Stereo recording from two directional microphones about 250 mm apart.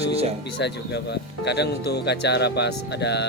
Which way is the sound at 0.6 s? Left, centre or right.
Left.